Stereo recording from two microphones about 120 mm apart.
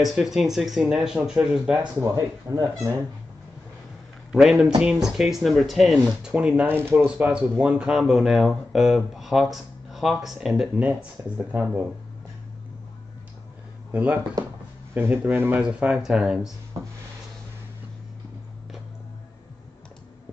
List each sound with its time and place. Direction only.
0.0 s speech: centre (ahead or behind)
2.0 s speech: 30° right (ahead or behind)
4.3 s speech: centre (ahead or behind)
13.9 s speech: 10° right (ahead or behind)